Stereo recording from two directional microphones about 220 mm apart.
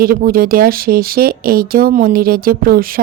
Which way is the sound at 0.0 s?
40° right (ahead or behind).